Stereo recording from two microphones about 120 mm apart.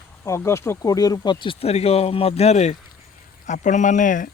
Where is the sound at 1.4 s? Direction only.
60° left (ahead or behind).